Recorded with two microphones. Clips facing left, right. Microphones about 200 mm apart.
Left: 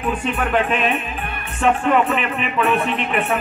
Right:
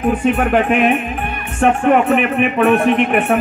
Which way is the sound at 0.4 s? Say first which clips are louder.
Right 6 dB; 55° right (ahead or behind).